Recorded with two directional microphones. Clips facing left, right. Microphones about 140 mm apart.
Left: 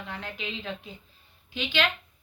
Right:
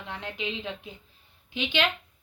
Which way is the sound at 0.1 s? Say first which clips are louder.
Right 4 dB; 20° right (ahead or behind).